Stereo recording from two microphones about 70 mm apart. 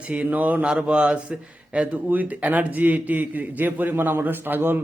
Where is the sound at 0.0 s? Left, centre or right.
Centre.